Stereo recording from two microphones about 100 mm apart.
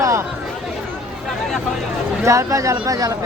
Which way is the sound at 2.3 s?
30° right (ahead or behind).